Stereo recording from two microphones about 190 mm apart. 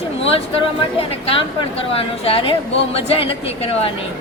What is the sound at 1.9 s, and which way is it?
A woman's voice, 30° left (ahead or behind).